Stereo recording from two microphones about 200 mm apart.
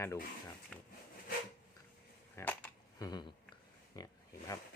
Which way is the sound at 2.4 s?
10° left (ahead or behind).